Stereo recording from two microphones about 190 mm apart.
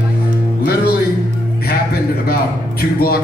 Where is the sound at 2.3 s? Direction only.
55° left (ahead or behind).